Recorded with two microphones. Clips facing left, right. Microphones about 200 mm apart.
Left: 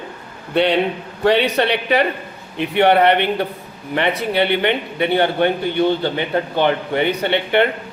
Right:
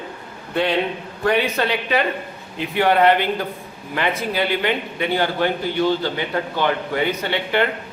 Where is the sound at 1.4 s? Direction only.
70° left (ahead or behind).